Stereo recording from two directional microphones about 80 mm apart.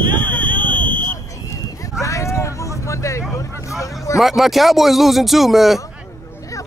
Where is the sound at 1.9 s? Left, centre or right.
Left.